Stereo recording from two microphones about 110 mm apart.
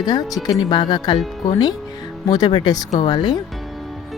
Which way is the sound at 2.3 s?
40° left (ahead or behind).